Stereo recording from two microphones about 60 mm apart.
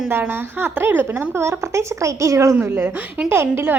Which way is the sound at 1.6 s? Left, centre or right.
Right.